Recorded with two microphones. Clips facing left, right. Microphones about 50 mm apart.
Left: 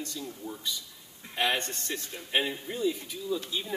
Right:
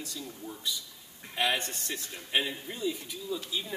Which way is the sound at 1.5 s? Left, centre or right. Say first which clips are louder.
Left 1 dB; centre.